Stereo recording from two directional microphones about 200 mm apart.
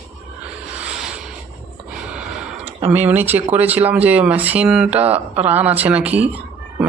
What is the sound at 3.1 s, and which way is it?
Speech, 10° right (ahead or behind).